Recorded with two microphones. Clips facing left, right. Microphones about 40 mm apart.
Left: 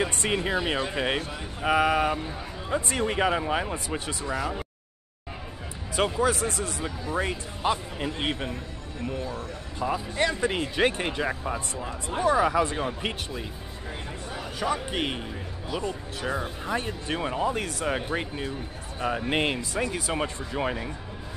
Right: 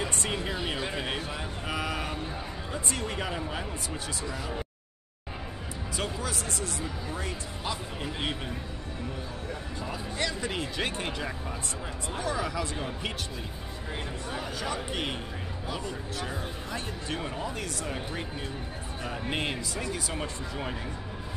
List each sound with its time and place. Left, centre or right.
0.0 s speech: left
5.9 s speech: left
8.0 s speech: left
9.8 s speech: left
14.6 s speech: centre
16.3 s speech: left